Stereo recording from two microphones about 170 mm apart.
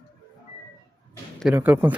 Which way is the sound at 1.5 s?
10° right (ahead or behind).